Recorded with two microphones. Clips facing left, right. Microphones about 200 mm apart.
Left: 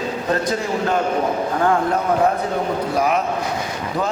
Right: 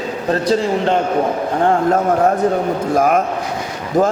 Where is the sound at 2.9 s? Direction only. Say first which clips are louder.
Right 5 dB; 50° right (ahead or behind).